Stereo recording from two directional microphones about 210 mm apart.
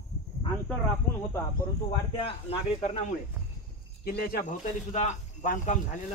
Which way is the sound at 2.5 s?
30° left (ahead or behind).